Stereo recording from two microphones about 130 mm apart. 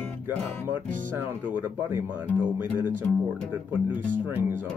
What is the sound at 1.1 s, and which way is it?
Speech, 15° right (ahead or behind).